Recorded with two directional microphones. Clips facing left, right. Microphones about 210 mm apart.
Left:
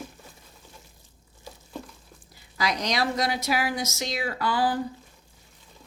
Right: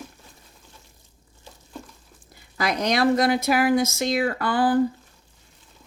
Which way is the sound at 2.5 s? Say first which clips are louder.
Right 4 dB; 55° right (ahead or behind).